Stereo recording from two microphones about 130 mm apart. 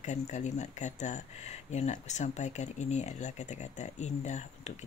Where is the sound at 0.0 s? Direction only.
65° left (ahead or behind).